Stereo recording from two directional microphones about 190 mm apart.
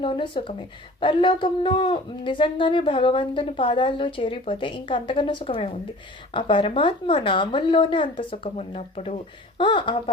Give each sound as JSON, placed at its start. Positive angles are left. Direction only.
{"t": 0.0, "sound": "speech", "side_deg": 25}